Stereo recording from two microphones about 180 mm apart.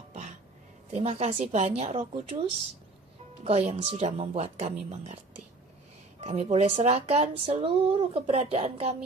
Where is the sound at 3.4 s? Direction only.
35° right (ahead or behind).